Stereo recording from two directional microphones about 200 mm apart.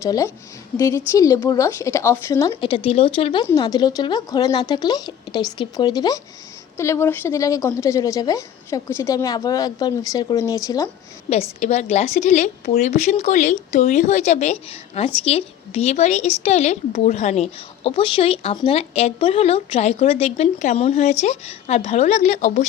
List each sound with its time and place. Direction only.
0.0 s a woman's voice: 15° left (ahead or behind)
2.6 s a woman's voice: 25° left (ahead or behind)
11.3 s speech: 35° left (ahead or behind)